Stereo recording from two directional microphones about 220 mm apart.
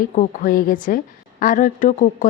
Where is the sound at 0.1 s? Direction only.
35° left (ahead or behind).